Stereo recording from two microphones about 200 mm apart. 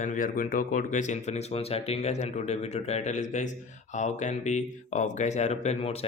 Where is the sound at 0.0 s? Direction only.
40° left (ahead or behind).